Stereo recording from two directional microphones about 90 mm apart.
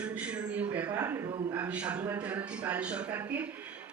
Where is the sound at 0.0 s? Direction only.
15° right (ahead or behind).